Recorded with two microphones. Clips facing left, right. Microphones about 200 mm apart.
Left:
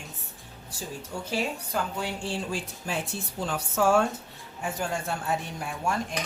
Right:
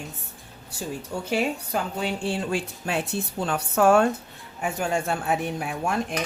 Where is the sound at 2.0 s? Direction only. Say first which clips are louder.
Right 5 dB; 65° right (ahead or behind).